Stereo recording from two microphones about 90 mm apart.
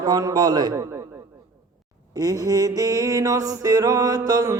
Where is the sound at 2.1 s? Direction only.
45° right (ahead or behind).